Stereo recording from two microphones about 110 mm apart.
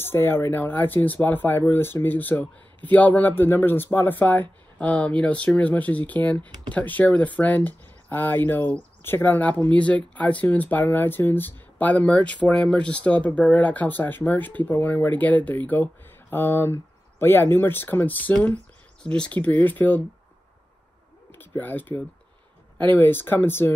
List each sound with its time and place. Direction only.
0.0 s speech: 20° left (ahead or behind)
21.3 s speech: 15° left (ahead or behind)